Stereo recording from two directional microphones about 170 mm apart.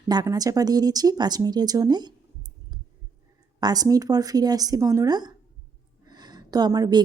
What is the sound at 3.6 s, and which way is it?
A woman's voice, 20° right (ahead or behind).